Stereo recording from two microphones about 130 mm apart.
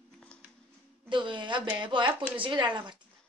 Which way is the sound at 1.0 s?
40° right (ahead or behind).